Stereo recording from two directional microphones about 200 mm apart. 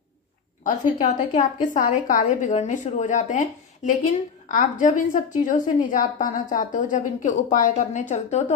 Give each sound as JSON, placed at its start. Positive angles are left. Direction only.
{"t": 1.0, "sound": "a woman's voice", "side_deg": 40}